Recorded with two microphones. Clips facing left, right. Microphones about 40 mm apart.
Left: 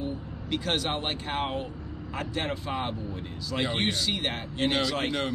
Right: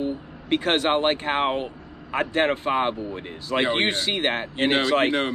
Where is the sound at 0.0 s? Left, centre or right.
Right.